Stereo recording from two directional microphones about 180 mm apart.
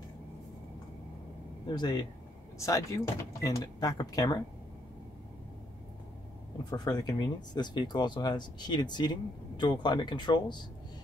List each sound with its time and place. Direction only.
1.8 s speech: 25° left (ahead or behind)
6.7 s speech: 25° left (ahead or behind)